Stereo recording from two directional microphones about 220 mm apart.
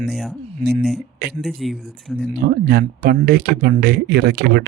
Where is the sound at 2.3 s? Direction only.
45° right (ahead or behind).